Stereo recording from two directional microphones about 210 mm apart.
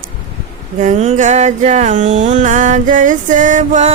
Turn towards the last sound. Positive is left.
turn(degrees=-35)  # may be behind; listen again after turning